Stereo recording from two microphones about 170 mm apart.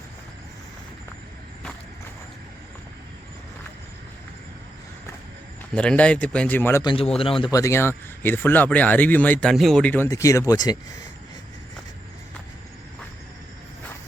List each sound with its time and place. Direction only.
5.7 s speech: 5° left (ahead or behind)
6.8 s speech: 35° left (ahead or behind)
7.5 s speech: 15° left (ahead or behind)